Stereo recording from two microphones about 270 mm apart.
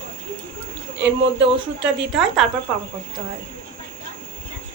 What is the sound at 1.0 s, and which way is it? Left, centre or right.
Speech, right.